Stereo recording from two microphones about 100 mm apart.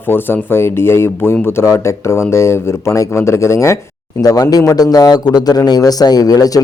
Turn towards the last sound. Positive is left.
turn(degrees=40)  # may be behind; listen again after turning